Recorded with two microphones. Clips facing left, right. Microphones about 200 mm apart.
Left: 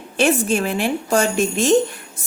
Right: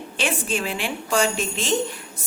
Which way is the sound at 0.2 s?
45° left (ahead or behind).